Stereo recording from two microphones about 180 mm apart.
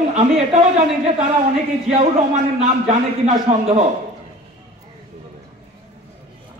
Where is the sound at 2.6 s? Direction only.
40° right (ahead or behind).